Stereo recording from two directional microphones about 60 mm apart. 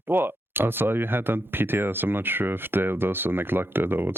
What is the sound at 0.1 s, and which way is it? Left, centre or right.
Speech, right.